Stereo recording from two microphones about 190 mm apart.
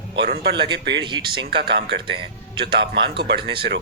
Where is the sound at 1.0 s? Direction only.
25° right (ahead or behind).